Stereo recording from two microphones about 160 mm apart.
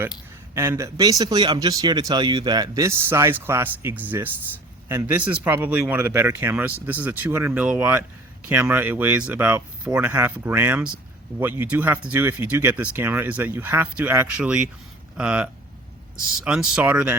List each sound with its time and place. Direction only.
0.5 s speech: 15° right (ahead or behind)